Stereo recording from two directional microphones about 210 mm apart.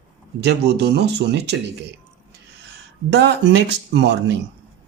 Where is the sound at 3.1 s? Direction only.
55° right (ahead or behind).